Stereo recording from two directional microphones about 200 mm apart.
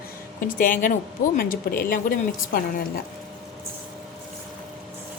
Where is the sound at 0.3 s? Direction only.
40° left (ahead or behind).